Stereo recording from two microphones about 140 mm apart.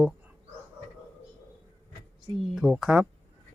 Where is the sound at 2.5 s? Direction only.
5° right (ahead or behind).